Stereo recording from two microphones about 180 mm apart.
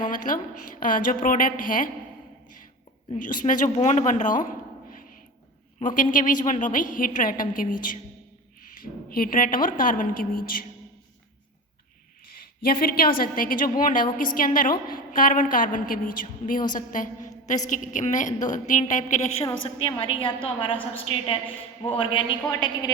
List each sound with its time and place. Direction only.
0.0 s a woman's voice: 45° left (ahead or behind)
3.2 s a woman's voice: 45° left (ahead or behind)
12.6 s a woman's voice: 55° left (ahead or behind)
19.6 s a woman's voice: 30° left (ahead or behind)